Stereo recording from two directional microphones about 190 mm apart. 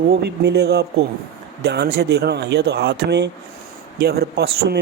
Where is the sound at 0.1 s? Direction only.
60° right (ahead or behind).